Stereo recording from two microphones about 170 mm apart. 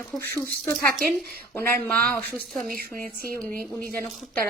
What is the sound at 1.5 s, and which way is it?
A woman's voice, 15° left (ahead or behind).